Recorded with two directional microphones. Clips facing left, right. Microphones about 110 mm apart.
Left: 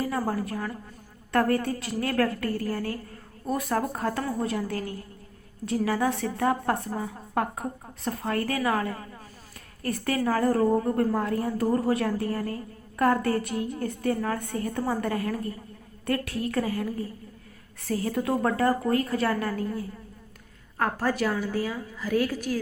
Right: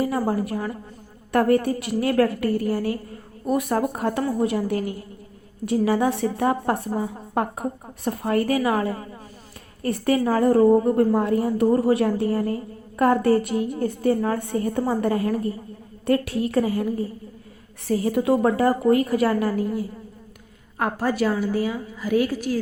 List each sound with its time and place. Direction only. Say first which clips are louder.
0.1 s a woman's voice: right 5 dB; 20° right (ahead or behind)